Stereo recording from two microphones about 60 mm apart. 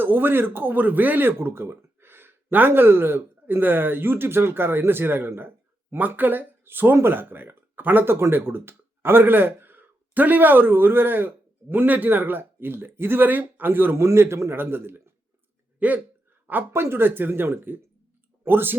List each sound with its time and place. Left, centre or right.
0.0 s speech: right
13.9 s a man's voice: right
15.8 s speech: right
16.5 s speech: right